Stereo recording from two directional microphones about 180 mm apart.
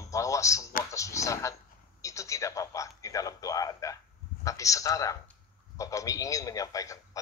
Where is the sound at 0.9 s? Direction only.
15° left (ahead or behind).